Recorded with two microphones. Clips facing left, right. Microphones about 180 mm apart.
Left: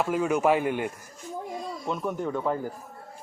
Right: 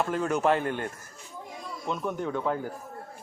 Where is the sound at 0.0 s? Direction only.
5° left (ahead or behind).